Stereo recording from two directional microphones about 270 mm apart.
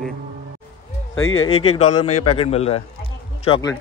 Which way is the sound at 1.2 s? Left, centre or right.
Left.